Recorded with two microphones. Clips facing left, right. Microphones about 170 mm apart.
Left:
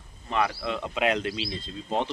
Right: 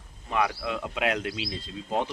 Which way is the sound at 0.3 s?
10° right (ahead or behind).